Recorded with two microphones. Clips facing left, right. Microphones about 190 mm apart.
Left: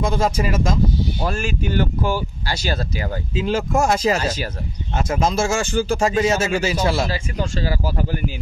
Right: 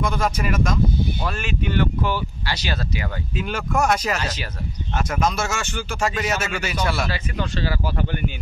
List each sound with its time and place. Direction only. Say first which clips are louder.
0.0 s speech: left 3 dB; 25° left (ahead or behind)
1.2 s speech: left 3 dB; 40° left (ahead or behind)
3.3 s speech: left 4 dB; 25° left (ahead or behind)
4.2 s speech: left 5 dB; 40° left (ahead or behind)
4.9 s speech: left 3 dB; 25° left (ahead or behind)